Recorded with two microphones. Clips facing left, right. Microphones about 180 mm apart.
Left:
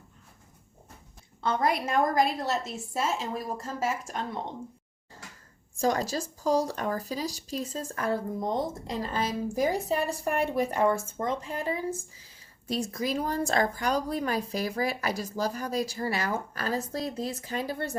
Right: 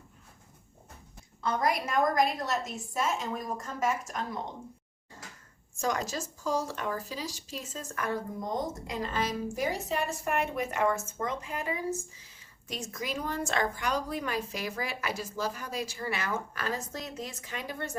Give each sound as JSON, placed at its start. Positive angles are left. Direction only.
{"t": 1.4, "sound": "a woman's voice", "side_deg": 30}
{"t": 5.8, "sound": "speech", "side_deg": 35}